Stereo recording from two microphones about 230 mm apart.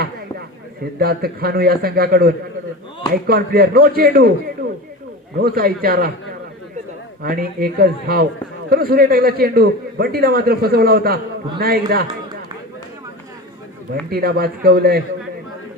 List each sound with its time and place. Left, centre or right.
0.0 s a man's voice: right
5.4 s a man's voice: right
7.2 s a man's voice: right
14.1 s a man's voice: right